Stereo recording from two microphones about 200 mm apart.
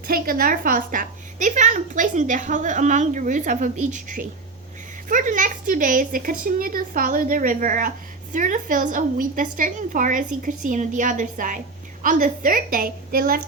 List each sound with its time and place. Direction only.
0.1 s a woman's voice: 45° right (ahead or behind)